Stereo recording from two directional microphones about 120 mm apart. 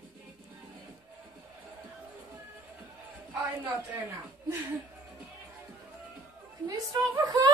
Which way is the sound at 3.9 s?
20° right (ahead or behind).